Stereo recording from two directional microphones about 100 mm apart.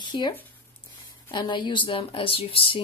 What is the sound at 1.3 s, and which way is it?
A woman's voice, 50° left (ahead or behind).